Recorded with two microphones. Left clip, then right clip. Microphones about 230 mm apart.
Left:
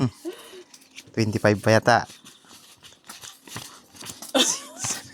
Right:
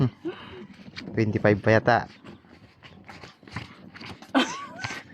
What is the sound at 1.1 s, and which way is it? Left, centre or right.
Speech, left.